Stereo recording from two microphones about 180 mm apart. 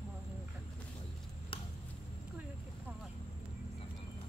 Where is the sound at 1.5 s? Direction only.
30° left (ahead or behind).